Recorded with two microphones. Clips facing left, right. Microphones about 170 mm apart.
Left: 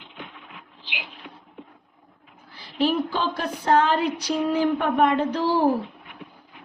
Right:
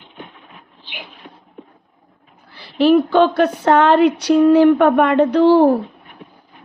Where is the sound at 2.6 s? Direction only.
70° right (ahead or behind).